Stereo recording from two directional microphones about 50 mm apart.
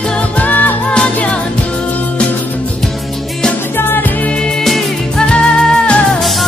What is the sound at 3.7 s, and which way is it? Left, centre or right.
Music, left.